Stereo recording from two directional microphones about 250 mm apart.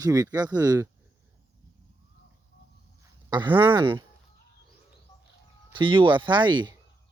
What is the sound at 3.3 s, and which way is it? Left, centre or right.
Speech, centre.